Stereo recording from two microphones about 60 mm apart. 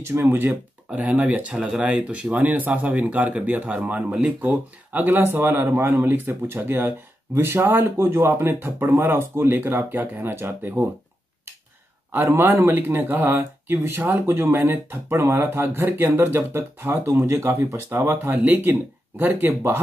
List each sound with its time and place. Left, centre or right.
0.0 s speech: right
0.9 s speech: right
4.5 s speech: right
12.1 s speech: right
18.1 s speech: right